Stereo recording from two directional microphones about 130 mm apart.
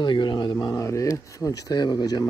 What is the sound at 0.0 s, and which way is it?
Speech, 35° left (ahead or behind).